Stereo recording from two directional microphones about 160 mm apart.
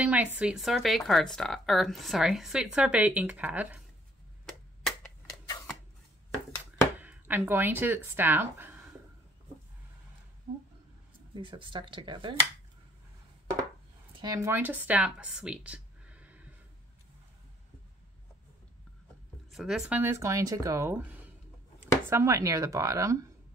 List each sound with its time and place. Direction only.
0.0 s a sound: 10° right (ahead or behind)
0.4 s speech: 5° right (ahead or behind)
4.5 s a sound: centre (ahead or behind)
7.0 s speech: 10° right (ahead or behind)
11.3 s speech: 30° right (ahead or behind)
14.1 s a woman's voice: 25° right (ahead or behind)
19.5 s speech: centre (ahead or behind)
20.0 s speech: 15° right (ahead or behind)